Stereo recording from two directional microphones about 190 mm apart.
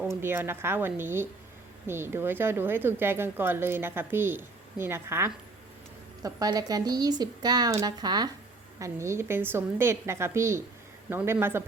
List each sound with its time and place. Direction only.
0.1 s a woman's voice: 10° right (ahead or behind)